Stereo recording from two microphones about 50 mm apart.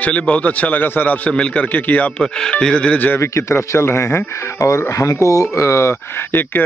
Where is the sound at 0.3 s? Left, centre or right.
Left.